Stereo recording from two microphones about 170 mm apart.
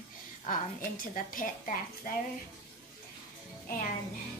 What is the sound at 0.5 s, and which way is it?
A woman's voice, 55° left (ahead or behind).